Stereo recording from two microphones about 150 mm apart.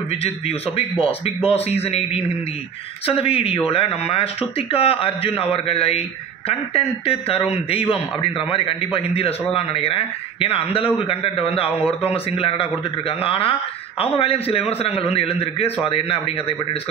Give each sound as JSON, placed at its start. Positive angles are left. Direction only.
{"t": 0.1, "sound": "a man's voice", "side_deg": 40}